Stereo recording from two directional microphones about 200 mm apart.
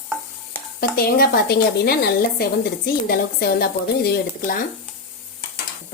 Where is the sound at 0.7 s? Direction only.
50° left (ahead or behind).